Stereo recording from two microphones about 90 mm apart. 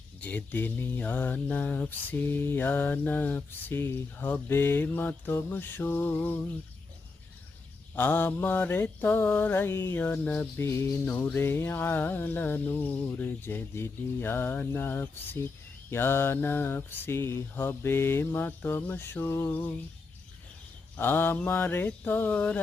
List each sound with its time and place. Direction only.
0.2 s speech: 20° left (ahead or behind)
7.9 s speech: 20° left (ahead or behind)
10.2 s music: 10° left (ahead or behind)
10.6 s speech: 30° left (ahead or behind)
20.9 s speech: 25° left (ahead or behind)